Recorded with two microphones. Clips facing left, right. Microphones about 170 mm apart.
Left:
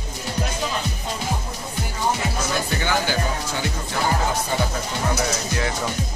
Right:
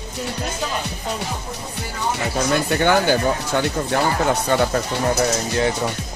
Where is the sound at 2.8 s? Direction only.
55° right (ahead or behind).